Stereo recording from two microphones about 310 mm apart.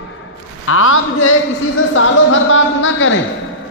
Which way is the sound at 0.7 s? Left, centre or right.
Left.